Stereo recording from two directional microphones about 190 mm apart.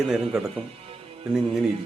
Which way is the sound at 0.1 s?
Centre (ahead or behind).